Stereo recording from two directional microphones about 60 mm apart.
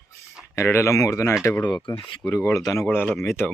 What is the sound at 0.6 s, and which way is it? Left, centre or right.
Speech, left.